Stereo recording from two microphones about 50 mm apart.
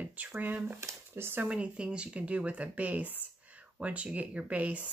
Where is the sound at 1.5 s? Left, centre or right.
Right.